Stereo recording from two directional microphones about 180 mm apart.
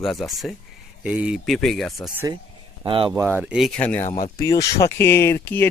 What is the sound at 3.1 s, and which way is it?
Speech, 15° right (ahead or behind).